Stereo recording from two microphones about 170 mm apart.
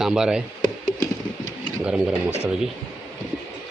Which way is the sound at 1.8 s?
5° right (ahead or behind).